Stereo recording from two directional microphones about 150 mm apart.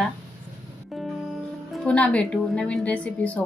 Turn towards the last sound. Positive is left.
turn(degrees=10)  # may be behind; listen again after turning